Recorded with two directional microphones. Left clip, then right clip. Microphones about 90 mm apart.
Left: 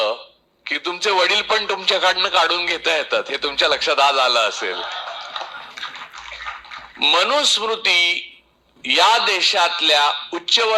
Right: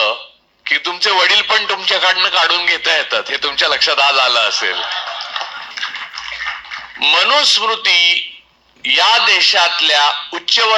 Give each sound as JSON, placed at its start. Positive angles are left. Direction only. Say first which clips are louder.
{"t": 0.6, "sound": "a man's voice", "louder": "right 6 dB", "side_deg": 40}